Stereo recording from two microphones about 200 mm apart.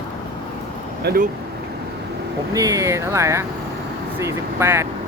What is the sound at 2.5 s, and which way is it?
Speech, 15° right (ahead or behind).